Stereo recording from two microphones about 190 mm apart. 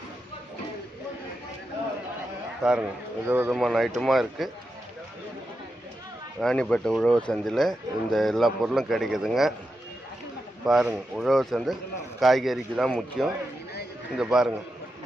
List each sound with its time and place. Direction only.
2.6 s a man's voice: 5° right (ahead or behind)
6.4 s speech: 5° left (ahead or behind)
10.6 s speech: 5° right (ahead or behind)